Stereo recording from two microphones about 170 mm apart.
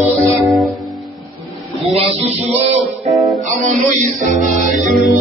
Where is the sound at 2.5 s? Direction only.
40° right (ahead or behind).